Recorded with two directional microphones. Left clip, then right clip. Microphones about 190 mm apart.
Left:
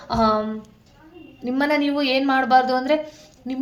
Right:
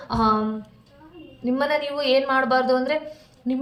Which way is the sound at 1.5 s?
35° left (ahead or behind).